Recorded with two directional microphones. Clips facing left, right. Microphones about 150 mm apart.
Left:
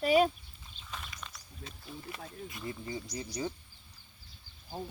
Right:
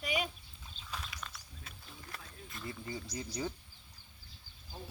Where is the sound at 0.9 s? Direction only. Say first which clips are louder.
Even; centre (ahead or behind).